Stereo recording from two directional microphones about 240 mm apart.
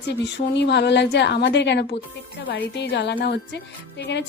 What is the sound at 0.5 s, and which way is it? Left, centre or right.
Speech, left.